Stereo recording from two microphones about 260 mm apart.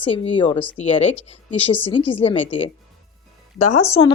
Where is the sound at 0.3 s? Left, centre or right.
Centre.